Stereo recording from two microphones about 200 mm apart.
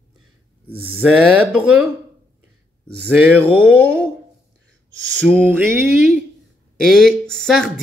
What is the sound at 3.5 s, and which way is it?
Speech, 10° right (ahead or behind).